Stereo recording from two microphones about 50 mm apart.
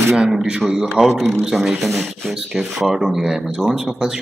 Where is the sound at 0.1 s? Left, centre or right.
Centre.